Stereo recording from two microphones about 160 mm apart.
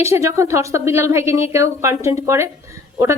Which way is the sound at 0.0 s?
15° right (ahead or behind).